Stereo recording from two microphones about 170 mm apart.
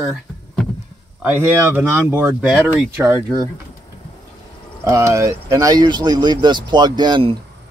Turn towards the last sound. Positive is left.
turn(degrees=-30)  # may be behind; listen again after turning